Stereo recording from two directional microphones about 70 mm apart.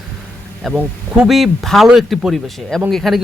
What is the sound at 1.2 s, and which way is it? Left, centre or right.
Speech, centre.